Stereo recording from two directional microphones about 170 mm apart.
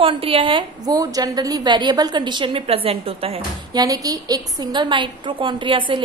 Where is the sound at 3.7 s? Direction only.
20° right (ahead or behind).